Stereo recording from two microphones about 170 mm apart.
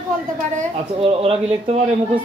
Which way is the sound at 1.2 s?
35° right (ahead or behind).